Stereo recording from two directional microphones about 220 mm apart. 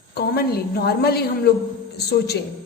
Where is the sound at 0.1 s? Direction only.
45° left (ahead or behind).